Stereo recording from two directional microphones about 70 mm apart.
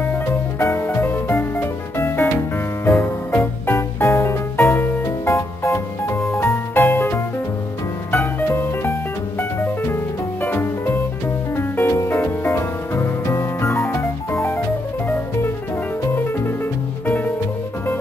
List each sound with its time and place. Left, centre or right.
0.0 s music: left
17.0 s music: left